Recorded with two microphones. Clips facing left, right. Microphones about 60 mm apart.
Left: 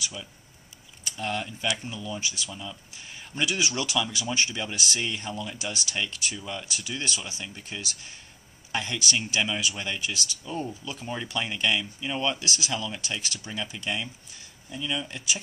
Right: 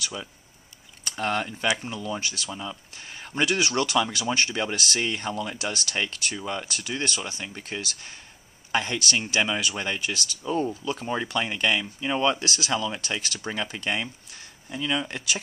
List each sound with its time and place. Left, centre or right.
0.0 s speech: right
2.5 s speech: right
11.1 s speech: right
12.4 s speech: right